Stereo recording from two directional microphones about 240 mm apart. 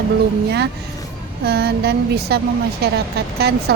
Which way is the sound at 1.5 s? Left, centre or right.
Right.